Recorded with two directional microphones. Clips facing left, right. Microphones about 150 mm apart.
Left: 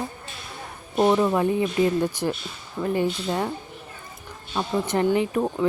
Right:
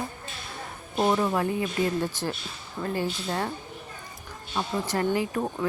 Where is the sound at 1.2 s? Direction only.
20° left (ahead or behind).